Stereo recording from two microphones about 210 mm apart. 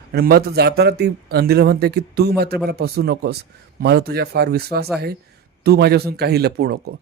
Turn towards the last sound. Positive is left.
turn(degrees=-50)  # may be behind; listen again after turning